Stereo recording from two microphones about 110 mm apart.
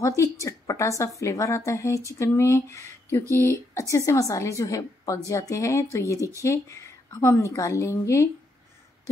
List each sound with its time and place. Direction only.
0.0 s a woman's voice: 25° left (ahead or behind)